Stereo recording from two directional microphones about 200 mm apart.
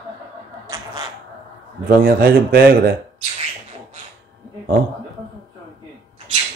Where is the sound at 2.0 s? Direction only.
50° right (ahead or behind).